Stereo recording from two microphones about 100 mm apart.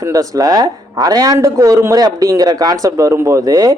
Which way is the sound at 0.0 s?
35° right (ahead or behind).